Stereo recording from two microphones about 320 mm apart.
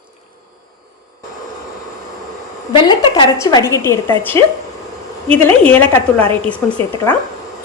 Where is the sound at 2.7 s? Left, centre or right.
Centre.